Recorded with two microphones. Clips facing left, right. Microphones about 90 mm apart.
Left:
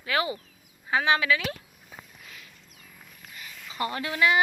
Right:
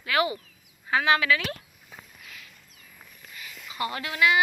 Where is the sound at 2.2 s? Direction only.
35° left (ahead or behind).